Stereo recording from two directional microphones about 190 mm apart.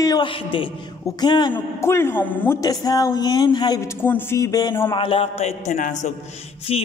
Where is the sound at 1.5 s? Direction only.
15° left (ahead or behind); by 6.1 s 40° left (ahead or behind).